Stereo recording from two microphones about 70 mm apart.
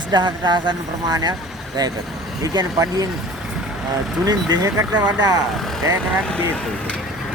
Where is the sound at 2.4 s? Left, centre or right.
Right.